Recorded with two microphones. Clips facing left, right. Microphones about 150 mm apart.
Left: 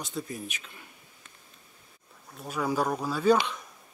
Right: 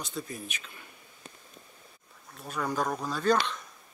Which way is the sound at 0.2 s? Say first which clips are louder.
Left 2 dB; 30° left (ahead or behind).